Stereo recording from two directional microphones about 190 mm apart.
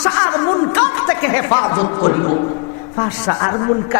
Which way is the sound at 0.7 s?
15° left (ahead or behind).